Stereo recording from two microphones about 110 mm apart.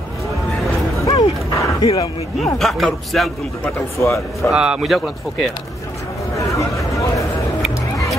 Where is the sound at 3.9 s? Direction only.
25° left (ahead or behind).